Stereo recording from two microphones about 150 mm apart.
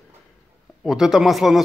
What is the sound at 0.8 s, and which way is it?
Speech, 5° right (ahead or behind).